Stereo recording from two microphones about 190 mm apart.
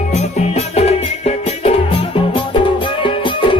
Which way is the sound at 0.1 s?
35° left (ahead or behind).